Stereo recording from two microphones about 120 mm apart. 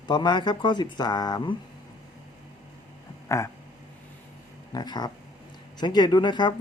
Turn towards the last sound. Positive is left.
turn(degrees=40)  # may be behind; listen again after turning